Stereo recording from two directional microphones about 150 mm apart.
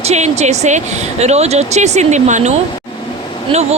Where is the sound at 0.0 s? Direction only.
45° right (ahead or behind).